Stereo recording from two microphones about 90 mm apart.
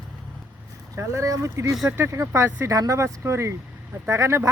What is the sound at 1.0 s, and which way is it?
Speech, 35° right (ahead or behind).